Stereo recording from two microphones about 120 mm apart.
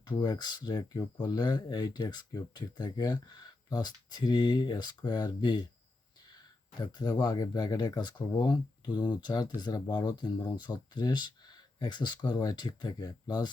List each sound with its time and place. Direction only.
0.2 s speech: 35° left (ahead or behind)
6.7 s speech: 35° left (ahead or behind)